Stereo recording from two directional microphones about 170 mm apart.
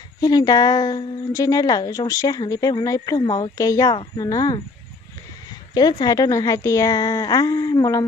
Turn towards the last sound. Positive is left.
turn(degrees=20)  # may be behind; listen again after turning